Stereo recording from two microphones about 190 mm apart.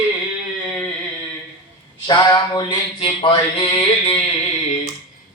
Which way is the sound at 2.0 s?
20° left (ahead or behind).